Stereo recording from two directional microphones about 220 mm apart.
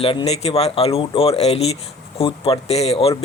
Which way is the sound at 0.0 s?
25° left (ahead or behind).